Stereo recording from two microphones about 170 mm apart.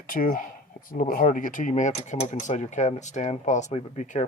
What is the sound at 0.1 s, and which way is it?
Speech, 55° left (ahead or behind).